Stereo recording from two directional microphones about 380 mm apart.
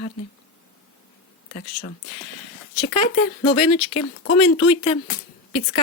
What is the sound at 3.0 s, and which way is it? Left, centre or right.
Speech, centre.